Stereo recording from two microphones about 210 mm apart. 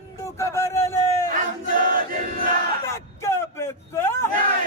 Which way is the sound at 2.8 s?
15° left (ahead or behind).